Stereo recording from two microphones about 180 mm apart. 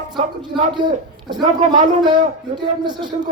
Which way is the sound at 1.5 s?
40° right (ahead or behind).